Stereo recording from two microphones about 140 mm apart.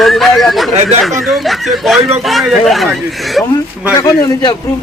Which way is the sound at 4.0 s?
30° left (ahead or behind).